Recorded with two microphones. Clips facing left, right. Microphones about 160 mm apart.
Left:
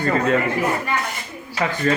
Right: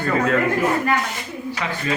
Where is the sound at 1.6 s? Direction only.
45° left (ahead or behind).